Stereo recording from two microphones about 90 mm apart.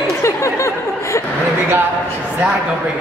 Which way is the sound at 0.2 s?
35° left (ahead or behind).